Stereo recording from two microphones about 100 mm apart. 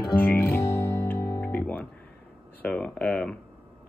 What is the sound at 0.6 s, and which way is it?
Music, 35° left (ahead or behind).